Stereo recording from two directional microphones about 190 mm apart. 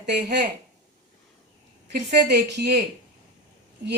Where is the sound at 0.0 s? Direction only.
60° right (ahead or behind).